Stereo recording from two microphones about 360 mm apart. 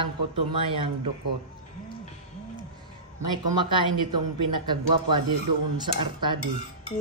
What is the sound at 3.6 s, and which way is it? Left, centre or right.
Speech, centre.